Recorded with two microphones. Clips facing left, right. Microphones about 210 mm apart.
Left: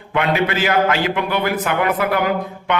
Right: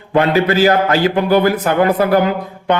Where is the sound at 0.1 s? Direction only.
35° right (ahead or behind).